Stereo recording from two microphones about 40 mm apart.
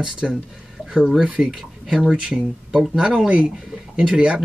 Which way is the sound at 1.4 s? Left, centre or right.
Right.